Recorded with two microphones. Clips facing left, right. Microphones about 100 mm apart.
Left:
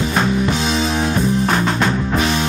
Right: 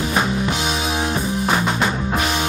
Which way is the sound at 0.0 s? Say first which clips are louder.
Left 3 dB; 5° right (ahead or behind).